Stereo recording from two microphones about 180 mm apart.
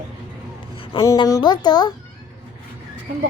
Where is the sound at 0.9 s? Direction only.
25° left (ahead or behind).